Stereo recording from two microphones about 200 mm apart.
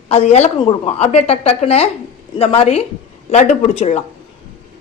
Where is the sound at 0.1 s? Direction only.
35° left (ahead or behind).